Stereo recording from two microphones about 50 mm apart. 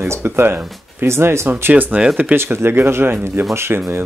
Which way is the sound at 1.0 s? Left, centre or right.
Right.